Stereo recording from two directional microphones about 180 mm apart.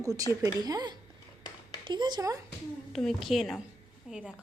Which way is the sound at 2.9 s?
Centre (ahead or behind).